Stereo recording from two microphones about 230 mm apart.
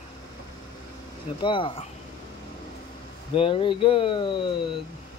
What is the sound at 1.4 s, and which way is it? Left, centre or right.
Speech, left.